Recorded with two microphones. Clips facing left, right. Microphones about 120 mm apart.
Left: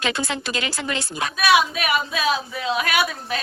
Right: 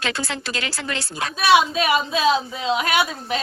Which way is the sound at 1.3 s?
30° right (ahead or behind).